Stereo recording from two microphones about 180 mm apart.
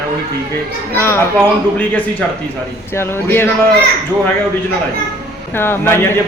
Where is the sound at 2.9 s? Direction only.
15° left (ahead or behind).